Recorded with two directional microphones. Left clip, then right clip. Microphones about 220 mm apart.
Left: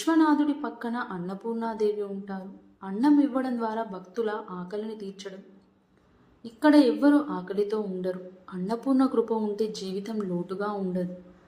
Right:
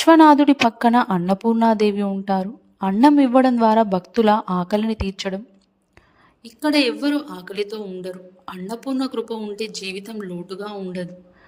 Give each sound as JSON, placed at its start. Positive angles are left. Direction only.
{"t": 0.0, "sound": "speech", "side_deg": -45}
{"t": 6.7, "sound": "speech", "side_deg": -45}
{"t": 8.0, "sound": "a woman's voice", "side_deg": 0}
{"t": 8.8, "sound": "speech", "side_deg": -45}
{"t": 10.0, "sound": "a woman's voice", "side_deg": 0}
{"t": 10.5, "sound": "speech", "side_deg": -45}